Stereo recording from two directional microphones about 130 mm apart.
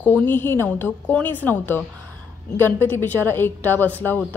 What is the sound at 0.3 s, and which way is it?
A woman's voice, 15° left (ahead or behind).